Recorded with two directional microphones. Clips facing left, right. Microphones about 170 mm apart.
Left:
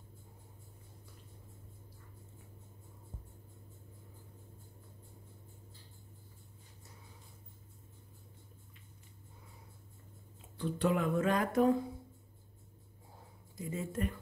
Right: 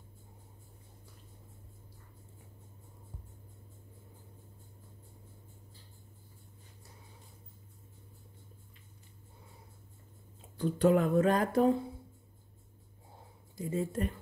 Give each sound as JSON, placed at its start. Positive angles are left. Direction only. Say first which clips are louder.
{"t": 10.6, "sound": "speech", "louder": "right 6 dB", "side_deg": -40}
{"t": 13.6, "sound": "speech", "louder": "right 4 dB", "side_deg": -35}